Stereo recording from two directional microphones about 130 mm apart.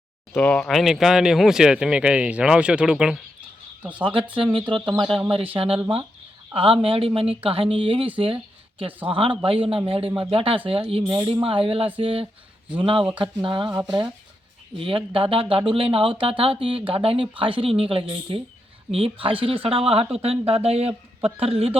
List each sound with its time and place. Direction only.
0.3 s speech: 10° left (ahead or behind)
0.7 s speech: centre (ahead or behind)
4.0 s speech: 40° right (ahead or behind)